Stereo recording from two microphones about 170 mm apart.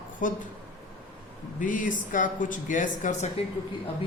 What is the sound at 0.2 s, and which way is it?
Speech, 50° left (ahead or behind).